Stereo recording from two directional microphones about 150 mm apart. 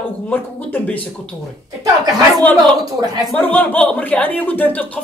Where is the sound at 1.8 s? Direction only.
25° right (ahead or behind).